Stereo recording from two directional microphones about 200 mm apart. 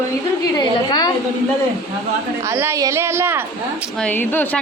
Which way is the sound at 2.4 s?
10° right (ahead or behind).